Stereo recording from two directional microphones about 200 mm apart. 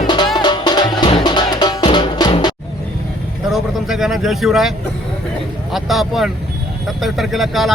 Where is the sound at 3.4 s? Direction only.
Centre (ahead or behind).